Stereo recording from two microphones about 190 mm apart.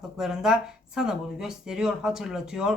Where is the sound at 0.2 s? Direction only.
Centre (ahead or behind).